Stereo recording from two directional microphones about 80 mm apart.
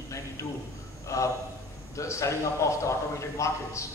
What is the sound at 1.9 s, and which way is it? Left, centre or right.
A man's voice, left.